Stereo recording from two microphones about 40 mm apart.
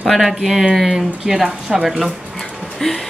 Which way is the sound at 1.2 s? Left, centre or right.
Centre.